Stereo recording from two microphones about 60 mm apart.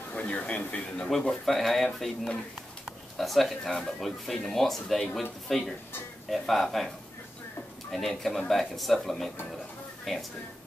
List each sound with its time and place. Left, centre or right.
0.1 s speech: left
1.3 s speech: centre
7.9 s speech: centre